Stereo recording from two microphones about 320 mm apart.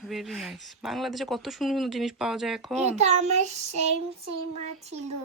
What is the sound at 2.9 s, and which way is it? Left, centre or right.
Child singing, right.